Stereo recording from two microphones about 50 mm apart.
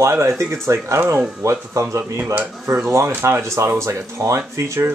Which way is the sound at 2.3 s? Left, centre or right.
Right.